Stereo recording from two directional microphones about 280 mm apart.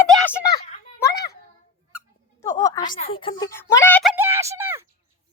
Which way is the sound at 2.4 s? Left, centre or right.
Centre.